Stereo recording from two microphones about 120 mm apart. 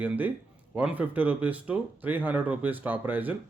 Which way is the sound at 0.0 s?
15° right (ahead or behind).